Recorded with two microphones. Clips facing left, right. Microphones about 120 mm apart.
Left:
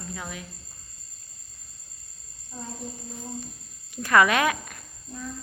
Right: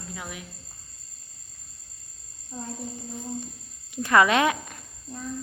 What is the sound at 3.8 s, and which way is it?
Speech, 20° right (ahead or behind).